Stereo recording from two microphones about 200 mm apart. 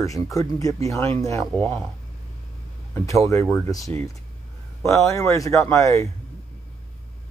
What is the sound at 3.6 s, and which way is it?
Speech, 15° left (ahead or behind).